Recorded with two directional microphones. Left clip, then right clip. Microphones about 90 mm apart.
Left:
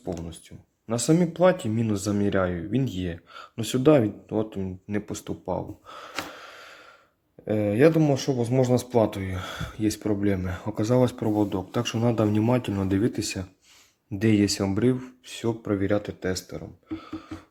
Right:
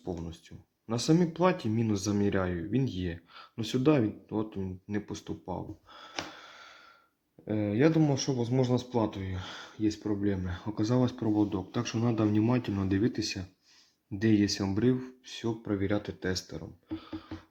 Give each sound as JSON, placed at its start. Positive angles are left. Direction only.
{"t": 0.9, "sound": "speech", "side_deg": 30}
{"t": 7.4, "sound": "speech", "side_deg": 45}
{"t": 8.7, "sound": "speech", "side_deg": 65}
{"t": 10.4, "sound": "speech", "side_deg": 40}
{"t": 13.1, "sound": "speech", "side_deg": 45}
{"t": 14.6, "sound": "speech", "side_deg": 30}